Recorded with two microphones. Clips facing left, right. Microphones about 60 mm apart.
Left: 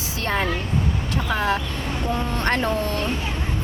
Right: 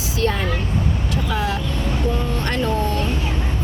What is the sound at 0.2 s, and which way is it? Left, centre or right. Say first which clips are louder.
Speech: right 2 dB; left.